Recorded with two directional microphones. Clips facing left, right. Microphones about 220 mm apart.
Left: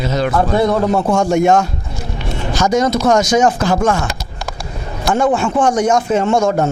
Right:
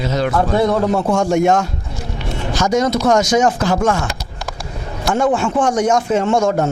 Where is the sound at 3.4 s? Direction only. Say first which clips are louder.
Left 1 dB; 25° left (ahead or behind).